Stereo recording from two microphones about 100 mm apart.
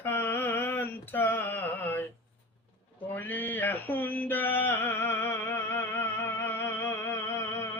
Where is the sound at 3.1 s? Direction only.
20° left (ahead or behind).